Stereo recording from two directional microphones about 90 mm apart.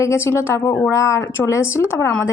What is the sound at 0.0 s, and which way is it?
Speech, 30° left (ahead or behind).